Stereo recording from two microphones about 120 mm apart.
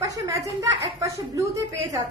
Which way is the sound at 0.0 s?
30° right (ahead or behind).